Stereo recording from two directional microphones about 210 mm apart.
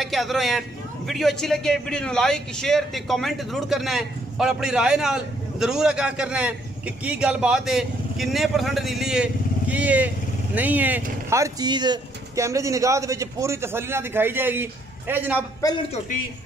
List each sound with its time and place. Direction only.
0.0 s a man's voice: centre (ahead or behind)